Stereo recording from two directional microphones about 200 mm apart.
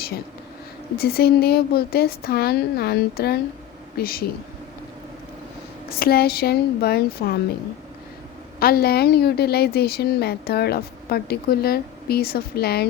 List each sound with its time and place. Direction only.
0.9 s a woman's voice: 50° left (ahead or behind)
6.0 s a woman's voice: 50° left (ahead or behind)
8.5 s a woman's voice: 50° left (ahead or behind)